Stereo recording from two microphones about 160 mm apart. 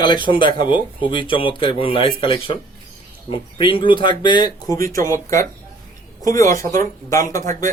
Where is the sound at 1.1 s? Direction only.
30° left (ahead or behind).